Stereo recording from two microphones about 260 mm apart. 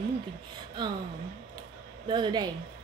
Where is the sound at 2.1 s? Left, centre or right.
Centre.